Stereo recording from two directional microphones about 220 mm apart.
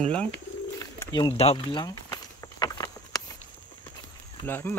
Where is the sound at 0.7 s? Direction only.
15° left (ahead or behind).